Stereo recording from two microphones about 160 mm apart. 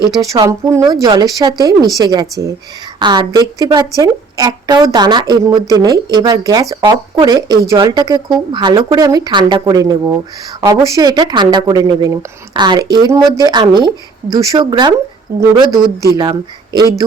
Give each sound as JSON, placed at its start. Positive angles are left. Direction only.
{"t": 0.2, "sound": "a woman's voice", "side_deg": -20}